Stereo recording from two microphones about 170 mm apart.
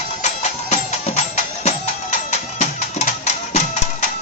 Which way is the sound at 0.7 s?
40° left (ahead or behind).